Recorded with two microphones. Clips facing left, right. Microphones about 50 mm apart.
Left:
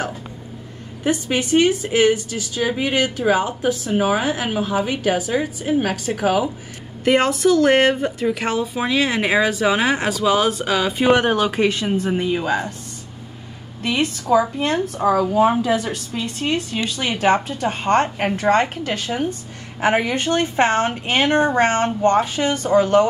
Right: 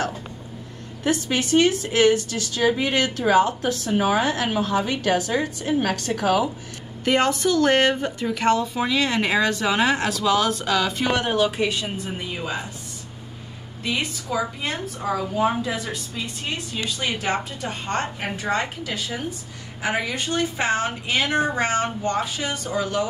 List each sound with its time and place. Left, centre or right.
1.0 s a woman's voice: centre
11.1 s speech: left
12.1 s a woman's voice: left
13.8 s a woman's voice: left
19.8 s a woman's voice: left